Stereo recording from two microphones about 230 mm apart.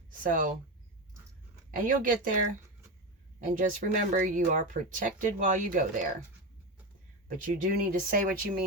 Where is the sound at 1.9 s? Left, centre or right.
Right.